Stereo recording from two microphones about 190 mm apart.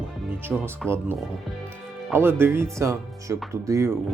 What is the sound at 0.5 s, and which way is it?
Speech, 5° right (ahead or behind).